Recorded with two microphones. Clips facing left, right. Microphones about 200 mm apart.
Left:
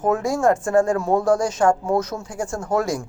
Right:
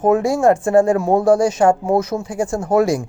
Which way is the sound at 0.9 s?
25° right (ahead or behind).